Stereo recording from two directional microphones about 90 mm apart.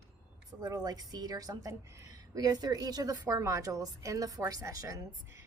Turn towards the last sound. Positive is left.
turn(degrees=-35)  # may be behind; listen again after turning